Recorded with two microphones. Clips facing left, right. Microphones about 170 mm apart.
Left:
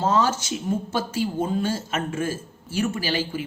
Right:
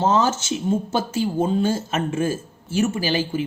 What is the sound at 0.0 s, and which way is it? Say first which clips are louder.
Speech: right 2 dB; 25° right (ahead or behind).